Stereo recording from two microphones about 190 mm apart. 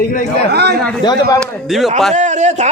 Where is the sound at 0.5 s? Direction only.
60° right (ahead or behind).